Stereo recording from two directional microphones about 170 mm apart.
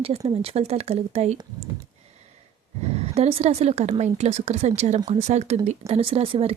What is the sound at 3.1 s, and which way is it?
A woman's voice, 35° right (ahead or behind).